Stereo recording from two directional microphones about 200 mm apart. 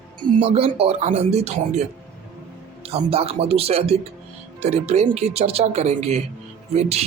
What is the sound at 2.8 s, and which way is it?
Speech, 30° right (ahead or behind).